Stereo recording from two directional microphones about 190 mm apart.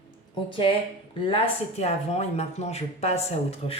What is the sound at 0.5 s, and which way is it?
A woman's voice, 30° left (ahead or behind).